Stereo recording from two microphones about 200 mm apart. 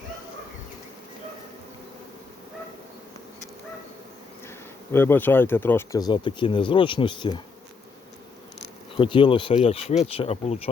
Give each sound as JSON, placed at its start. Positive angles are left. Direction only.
{"t": 4.4, "sound": "speech", "side_deg": 10}
{"t": 9.0, "sound": "speech", "side_deg": 25}